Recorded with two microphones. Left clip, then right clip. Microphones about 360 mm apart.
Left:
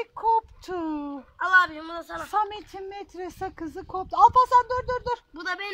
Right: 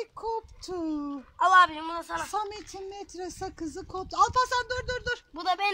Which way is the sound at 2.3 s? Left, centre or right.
Left.